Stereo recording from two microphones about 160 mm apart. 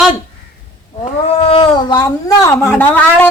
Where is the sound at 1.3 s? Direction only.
35° left (ahead or behind).